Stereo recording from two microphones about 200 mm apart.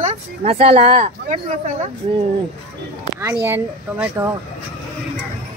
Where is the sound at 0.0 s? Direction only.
30° right (ahead or behind).